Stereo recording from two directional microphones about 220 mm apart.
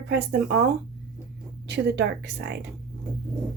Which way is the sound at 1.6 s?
50° right (ahead or behind).